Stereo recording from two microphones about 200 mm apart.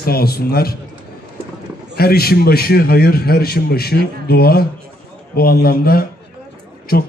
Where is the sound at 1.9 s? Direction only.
50° left (ahead or behind).